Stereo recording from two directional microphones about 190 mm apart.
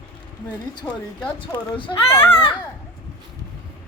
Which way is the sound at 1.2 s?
25° left (ahead or behind).